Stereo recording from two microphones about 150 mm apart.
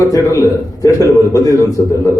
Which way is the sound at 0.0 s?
20° left (ahead or behind).